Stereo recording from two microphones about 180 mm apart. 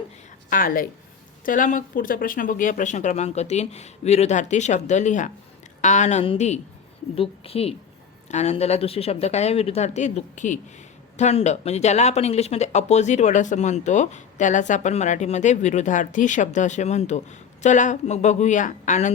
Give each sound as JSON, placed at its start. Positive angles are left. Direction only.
{"t": 0.5, "sound": "a woman's voice", "side_deg": 50}